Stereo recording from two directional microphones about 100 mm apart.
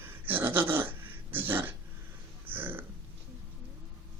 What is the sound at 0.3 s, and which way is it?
Dog, 20° right (ahead or behind).